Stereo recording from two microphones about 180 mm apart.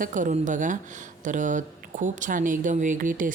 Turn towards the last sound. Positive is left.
turn(degrees=-50)  # may be behind; listen again after turning